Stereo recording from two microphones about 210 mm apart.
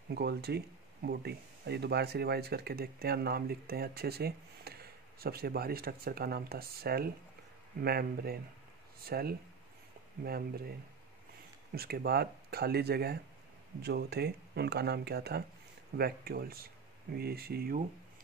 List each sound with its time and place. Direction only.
0.1 s speech: 50° right (ahead or behind)
11.7 s speech: 45° right (ahead or behind)